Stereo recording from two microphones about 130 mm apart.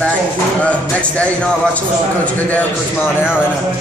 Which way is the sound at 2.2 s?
10° left (ahead or behind).